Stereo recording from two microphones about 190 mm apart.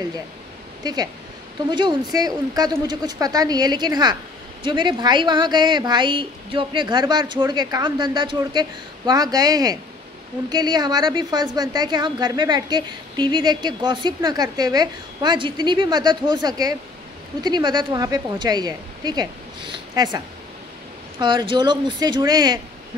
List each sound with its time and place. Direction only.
1.7 s a woman's voice: 25° right (ahead or behind)
21.2 s a woman's voice: 25° right (ahead or behind)